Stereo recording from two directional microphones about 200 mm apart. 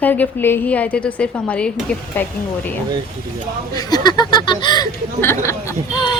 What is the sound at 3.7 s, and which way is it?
Speech, 20° left (ahead or behind).